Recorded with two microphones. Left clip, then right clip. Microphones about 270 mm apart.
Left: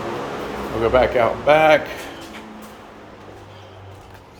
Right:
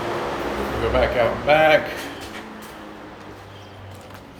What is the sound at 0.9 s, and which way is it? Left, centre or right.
Speech, centre.